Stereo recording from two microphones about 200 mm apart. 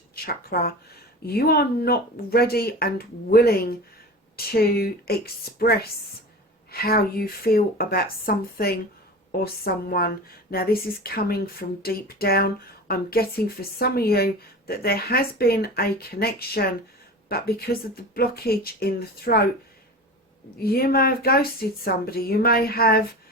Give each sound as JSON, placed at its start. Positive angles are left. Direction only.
{"t": 0.3, "sound": "a woman's voice", "side_deg": 45}
{"t": 20.6, "sound": "a woman's voice", "side_deg": 50}